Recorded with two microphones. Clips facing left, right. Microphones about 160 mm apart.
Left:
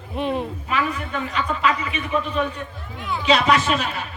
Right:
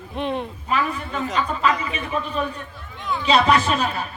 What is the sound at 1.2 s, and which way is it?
Speech, 35° right (ahead or behind).